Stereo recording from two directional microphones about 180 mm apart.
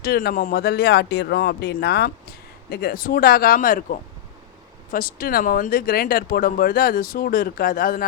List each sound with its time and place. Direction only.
0.0 s speech: 60° left (ahead or behind)